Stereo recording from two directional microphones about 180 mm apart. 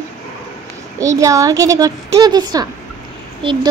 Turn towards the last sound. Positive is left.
turn(degrees=-30)  # may be behind; listen again after turning